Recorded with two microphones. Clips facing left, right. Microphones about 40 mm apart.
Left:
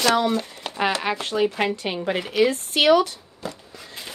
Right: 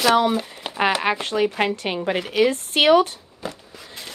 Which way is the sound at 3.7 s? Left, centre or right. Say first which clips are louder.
Even; centre.